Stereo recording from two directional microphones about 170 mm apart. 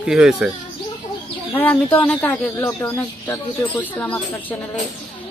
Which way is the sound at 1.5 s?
10° left (ahead or behind).